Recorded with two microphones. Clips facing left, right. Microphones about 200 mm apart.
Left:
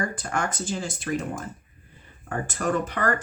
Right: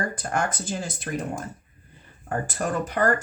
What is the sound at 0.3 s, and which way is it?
Speech, 45° right (ahead or behind).